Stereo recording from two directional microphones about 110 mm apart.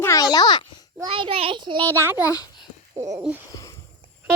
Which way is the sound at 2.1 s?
35° left (ahead or behind).